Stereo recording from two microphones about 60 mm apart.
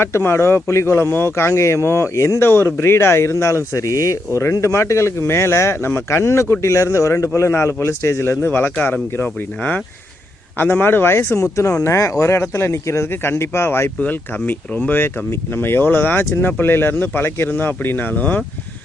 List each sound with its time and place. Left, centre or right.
0.0 s speech: left
4.4 s speech: left
8.7 s speech: left
11.3 s speech: left
14.0 s speech: left